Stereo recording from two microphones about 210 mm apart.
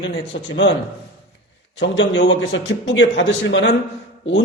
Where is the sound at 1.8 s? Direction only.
60° left (ahead or behind).